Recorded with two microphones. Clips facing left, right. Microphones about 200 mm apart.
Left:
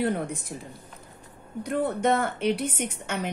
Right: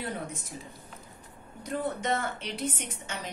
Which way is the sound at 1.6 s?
60° left (ahead or behind).